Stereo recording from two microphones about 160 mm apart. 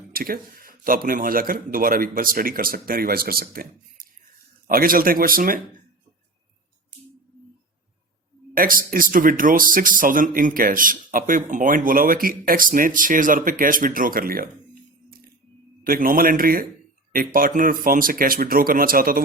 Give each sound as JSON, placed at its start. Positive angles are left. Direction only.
{"t": 0.1, "sound": "speech", "side_deg": -65}
{"t": 8.5, "sound": "speech", "side_deg": -60}
{"t": 15.8, "sound": "speech", "side_deg": -60}